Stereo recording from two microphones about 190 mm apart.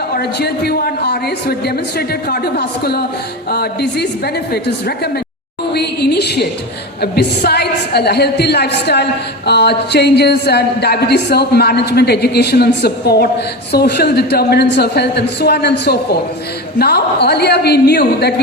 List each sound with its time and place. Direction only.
0.1 s a woman's voice: 60° left (ahead or behind)
5.7 s a sound: 60° left (ahead or behind)
7.0 s a woman's voice: 55° left (ahead or behind)